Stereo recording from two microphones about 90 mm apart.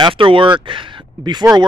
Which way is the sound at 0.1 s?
75° right (ahead or behind).